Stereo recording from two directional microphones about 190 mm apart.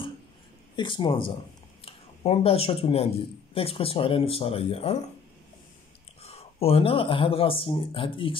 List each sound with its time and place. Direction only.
0.7 s speech: 25° left (ahead or behind)
6.2 s speech: 30° left (ahead or behind)